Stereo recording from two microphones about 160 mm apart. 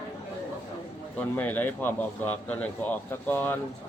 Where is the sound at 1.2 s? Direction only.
10° left (ahead or behind).